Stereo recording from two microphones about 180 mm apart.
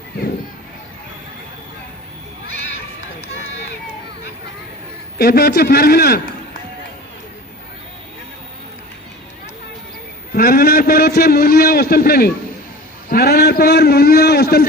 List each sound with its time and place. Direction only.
5.1 s a man's voice: 60° left (ahead or behind)
10.3 s a man's voice: 55° left (ahead or behind)